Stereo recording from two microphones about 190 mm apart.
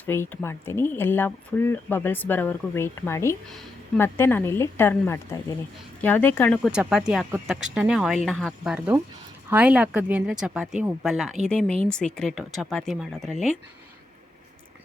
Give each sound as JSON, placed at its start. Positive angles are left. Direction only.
{"t": 0.0, "sound": "speech", "side_deg": 10}
{"t": 3.5, "sound": "speech", "side_deg": 0}
{"t": 4.0, "sound": "speech", "side_deg": 10}
{"t": 6.6, "sound": "speech", "side_deg": -5}